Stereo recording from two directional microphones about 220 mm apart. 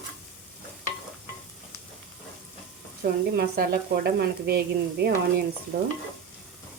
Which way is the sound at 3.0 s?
40° right (ahead or behind).